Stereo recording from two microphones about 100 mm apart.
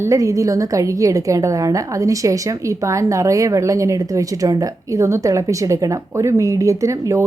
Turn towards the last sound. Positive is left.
turn(degrees=-30)  # may be behind; listen again after turning